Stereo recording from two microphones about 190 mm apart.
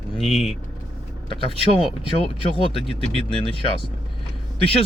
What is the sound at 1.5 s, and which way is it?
Speech, 30° left (ahead or behind).